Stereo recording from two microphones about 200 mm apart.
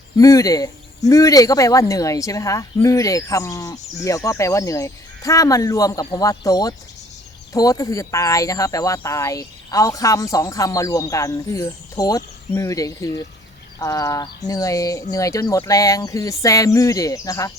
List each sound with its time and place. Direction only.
0.2 s speech: 15° left (ahead or behind)